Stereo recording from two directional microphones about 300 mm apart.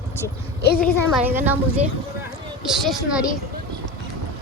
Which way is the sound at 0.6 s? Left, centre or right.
Left.